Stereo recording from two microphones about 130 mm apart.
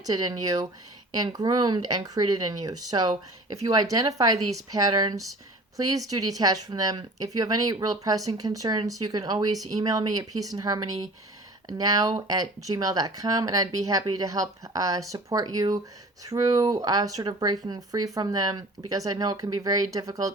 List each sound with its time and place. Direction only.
0.0 s speech: 30° right (ahead or behind)